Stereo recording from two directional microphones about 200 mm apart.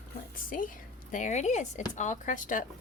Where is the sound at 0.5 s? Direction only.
45° left (ahead or behind).